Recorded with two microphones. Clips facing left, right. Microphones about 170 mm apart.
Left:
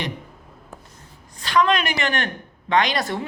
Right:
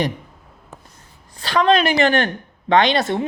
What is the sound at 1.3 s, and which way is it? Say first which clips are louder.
A woman's voice: right 3 dB; 30° right (ahead or behind).